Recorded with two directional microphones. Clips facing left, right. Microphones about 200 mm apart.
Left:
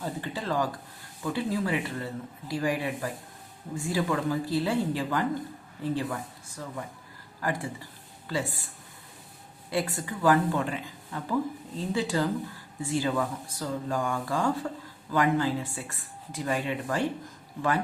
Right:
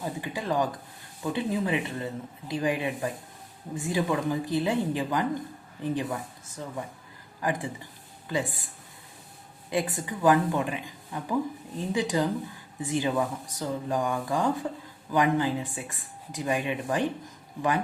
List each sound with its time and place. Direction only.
0.0 s speech: 15° right (ahead or behind)
7.4 s speech: 20° right (ahead or behind)
9.6 s speech: 20° right (ahead or behind)